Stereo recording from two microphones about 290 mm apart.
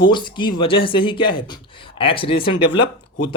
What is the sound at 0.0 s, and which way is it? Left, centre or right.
Speech, centre.